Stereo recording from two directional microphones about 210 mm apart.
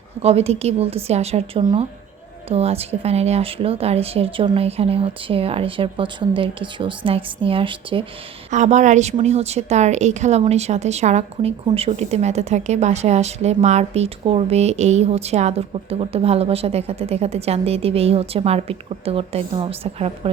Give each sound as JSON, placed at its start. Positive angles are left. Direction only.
{"t": 0.2, "sound": "a woman's voice", "side_deg": -30}